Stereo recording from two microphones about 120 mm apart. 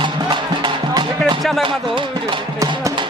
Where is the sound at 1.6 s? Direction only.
45° right (ahead or behind).